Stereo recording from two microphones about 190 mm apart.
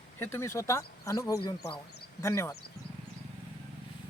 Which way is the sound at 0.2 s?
15° left (ahead or behind).